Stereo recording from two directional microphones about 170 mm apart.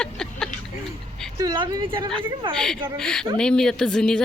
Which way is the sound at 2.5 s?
5° left (ahead or behind).